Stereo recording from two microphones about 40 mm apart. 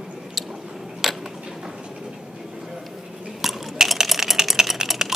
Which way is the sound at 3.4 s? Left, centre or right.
Centre.